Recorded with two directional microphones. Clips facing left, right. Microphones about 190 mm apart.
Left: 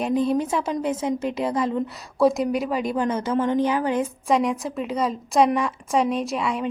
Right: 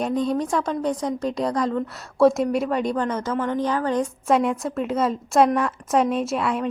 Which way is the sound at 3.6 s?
10° left (ahead or behind).